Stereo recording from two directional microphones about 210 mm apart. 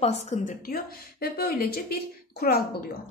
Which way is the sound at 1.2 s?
50° left (ahead or behind).